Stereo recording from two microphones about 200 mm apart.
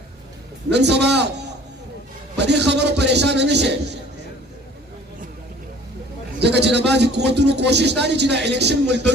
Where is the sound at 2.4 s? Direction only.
60° right (ahead or behind).